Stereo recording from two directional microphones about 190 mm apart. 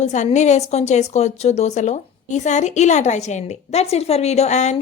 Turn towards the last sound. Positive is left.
turn(degrees=40)  # may be behind; listen again after turning